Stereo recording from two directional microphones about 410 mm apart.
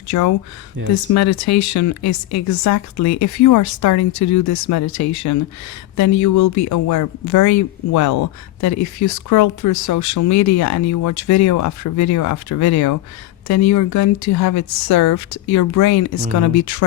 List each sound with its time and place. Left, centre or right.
0.1 s speech: left